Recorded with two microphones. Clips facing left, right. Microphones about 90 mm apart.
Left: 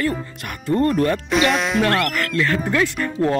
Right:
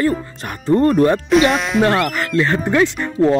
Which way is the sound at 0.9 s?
30° right (ahead or behind).